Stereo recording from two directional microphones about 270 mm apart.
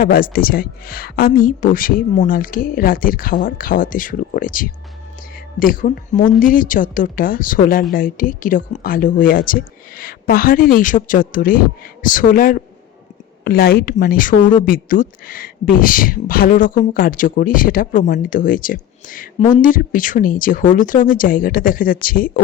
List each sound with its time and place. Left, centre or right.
0.0 s a woman's voice: left